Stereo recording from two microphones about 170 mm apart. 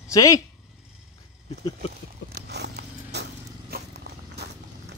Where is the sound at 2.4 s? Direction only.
80° right.